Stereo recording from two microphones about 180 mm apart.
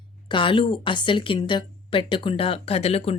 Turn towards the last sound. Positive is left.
turn(degrees=35)  # may be behind; listen again after turning